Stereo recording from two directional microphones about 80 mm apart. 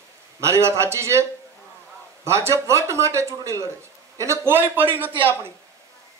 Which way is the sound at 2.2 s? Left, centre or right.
Right.